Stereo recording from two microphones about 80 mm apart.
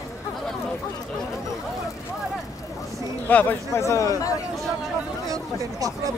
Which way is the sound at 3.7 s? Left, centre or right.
Left.